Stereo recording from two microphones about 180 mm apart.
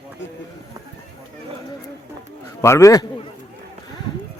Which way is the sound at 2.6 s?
15° left (ahead or behind).